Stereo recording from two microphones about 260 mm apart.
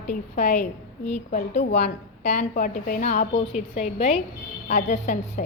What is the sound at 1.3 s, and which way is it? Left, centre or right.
A woman's voice, left.